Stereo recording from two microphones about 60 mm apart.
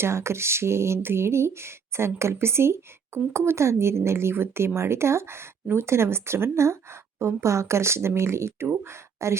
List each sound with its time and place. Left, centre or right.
0.0 s a woman's voice: right